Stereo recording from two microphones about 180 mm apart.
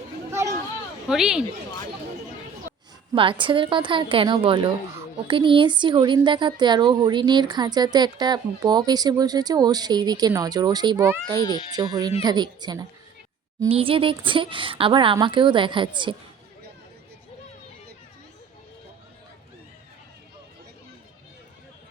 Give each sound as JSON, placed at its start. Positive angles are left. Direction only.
{"t": 0.3, "sound": "a sound", "side_deg": -15}
{"t": 1.0, "sound": "speech", "side_deg": -5}
{"t": 3.1, "sound": "a woman's voice", "side_deg": -30}